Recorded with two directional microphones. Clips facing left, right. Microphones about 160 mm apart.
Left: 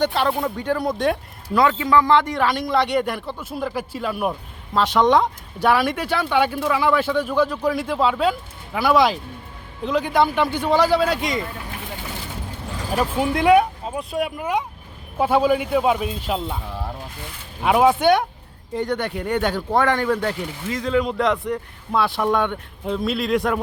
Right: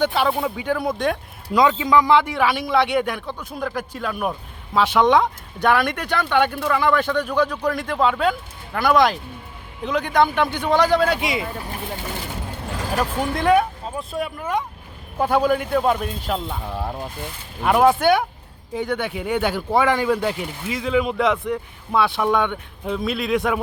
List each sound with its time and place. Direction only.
0.0 s speech: 5° right (ahead or behind)
1.5 s speech: 15° right (ahead or behind)
13.0 s speech: 5° left (ahead or behind)
16.6 s speech: 55° right (ahead or behind)
17.6 s speech: 5° left (ahead or behind)